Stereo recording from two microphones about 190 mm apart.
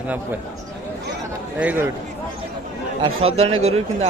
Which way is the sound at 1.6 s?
10° right (ahead or behind).